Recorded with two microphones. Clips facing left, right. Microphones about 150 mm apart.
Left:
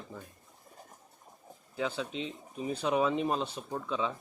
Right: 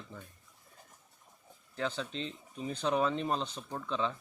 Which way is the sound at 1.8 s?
5° left (ahead or behind).